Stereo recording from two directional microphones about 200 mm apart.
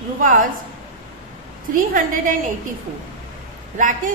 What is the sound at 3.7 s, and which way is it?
Speech, 40° right (ahead or behind).